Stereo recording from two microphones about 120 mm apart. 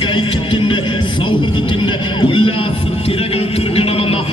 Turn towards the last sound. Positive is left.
turn(degrees=55)  # may be behind; listen again after turning